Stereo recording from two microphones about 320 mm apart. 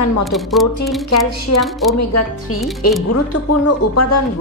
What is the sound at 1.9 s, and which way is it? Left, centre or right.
Speech, left.